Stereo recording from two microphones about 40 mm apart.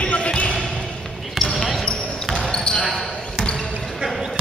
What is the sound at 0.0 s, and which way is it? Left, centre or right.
Basketball bounce, left.